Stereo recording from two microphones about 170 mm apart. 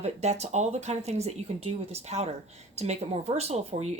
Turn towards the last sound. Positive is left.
turn(degrees=-40)  # may be behind; listen again after turning